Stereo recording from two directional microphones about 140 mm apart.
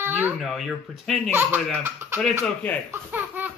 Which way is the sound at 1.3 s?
15° right (ahead or behind).